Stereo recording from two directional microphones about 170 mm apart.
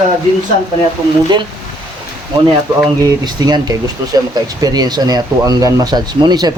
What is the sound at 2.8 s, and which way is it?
Speech, 20° right (ahead or behind).